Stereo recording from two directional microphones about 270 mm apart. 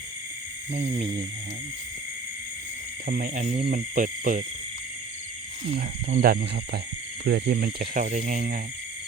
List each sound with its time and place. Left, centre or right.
0.7 s speech: right
3.1 s speech: right
5.7 s speech: right